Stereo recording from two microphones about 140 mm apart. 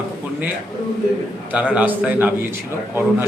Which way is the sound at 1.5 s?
10° right (ahead or behind).